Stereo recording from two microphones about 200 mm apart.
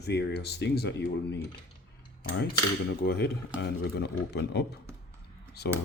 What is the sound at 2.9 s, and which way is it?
Speech, 55° left (ahead or behind).